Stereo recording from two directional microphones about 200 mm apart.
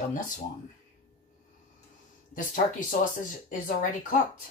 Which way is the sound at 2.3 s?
40° left (ahead or behind).